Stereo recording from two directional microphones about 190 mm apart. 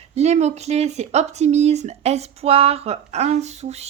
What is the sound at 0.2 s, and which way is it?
Speech, 35° right (ahead or behind).